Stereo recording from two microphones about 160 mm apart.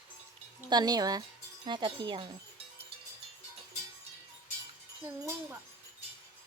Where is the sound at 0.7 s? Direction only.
25° right (ahead or behind).